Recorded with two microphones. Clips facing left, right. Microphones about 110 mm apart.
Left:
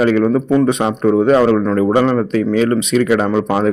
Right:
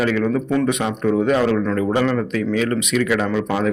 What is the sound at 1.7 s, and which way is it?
Speech, 35° left (ahead or behind).